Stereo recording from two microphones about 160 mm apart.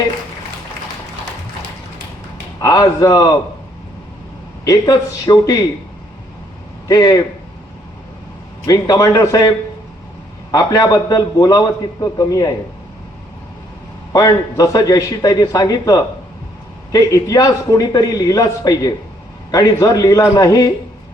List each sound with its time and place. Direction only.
2.6 s a man's voice: 20° left (ahead or behind)
4.6 s a man's voice: 25° left (ahead or behind)
6.8 s a man's voice: 20° left (ahead or behind)
8.6 s a man's voice: 20° left (ahead or behind)
10.5 s a man's voice: 20° left (ahead or behind)
14.1 s a man's voice: 20° left (ahead or behind)